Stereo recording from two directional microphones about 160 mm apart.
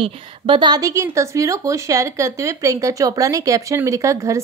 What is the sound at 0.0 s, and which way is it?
A woman's voice, 30° right (ahead or behind).